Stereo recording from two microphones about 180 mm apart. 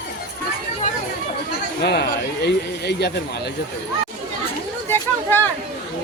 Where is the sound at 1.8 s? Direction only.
65° left (ahead or behind).